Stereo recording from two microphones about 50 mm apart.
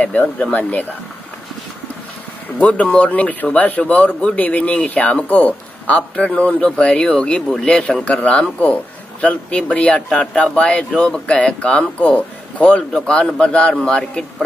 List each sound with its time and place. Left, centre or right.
0.0 s speech: left
0.6 s speech: left
2.6 s speech: left